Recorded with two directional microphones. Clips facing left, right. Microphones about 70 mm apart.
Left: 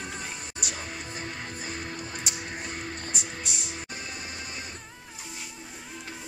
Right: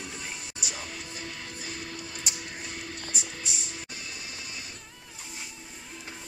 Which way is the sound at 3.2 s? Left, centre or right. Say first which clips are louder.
Left 2 dB; centre.